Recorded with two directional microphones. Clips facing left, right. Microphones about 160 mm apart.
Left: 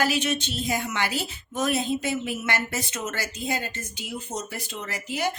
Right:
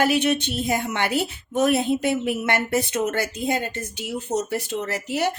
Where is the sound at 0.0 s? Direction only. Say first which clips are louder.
Right 5 dB; 55° right (ahead or behind).